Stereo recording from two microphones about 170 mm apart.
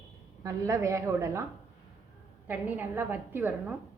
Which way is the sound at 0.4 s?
20° right (ahead or behind).